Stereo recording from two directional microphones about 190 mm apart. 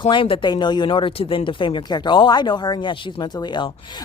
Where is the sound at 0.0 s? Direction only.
25° left (ahead or behind).